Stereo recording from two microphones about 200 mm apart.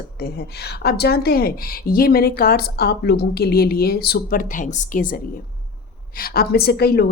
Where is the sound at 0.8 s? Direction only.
55° left (ahead or behind).